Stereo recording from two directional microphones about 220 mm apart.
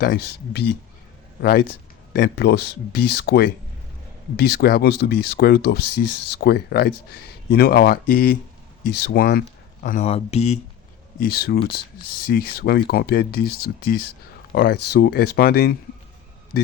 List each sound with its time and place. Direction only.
1.4 s speech: 45° left (ahead or behind)
10.0 s speech: 30° left (ahead or behind)
11.2 s speech: 45° left (ahead or behind)